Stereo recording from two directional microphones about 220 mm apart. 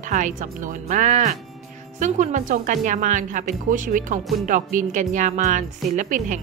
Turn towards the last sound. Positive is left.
turn(degrees=-35)  # may be behind; listen again after turning